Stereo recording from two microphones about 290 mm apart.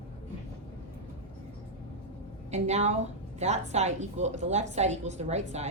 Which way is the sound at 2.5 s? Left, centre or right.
Right.